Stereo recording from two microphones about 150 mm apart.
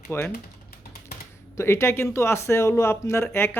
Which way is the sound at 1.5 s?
15° left (ahead or behind).